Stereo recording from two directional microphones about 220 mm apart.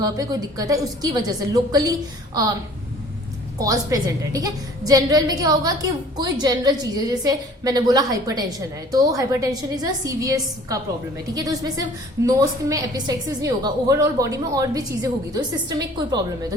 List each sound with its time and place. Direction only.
0.0 s a woman's voice: 15° right (ahead or behind)
3.6 s a woman's voice: 15° right (ahead or behind)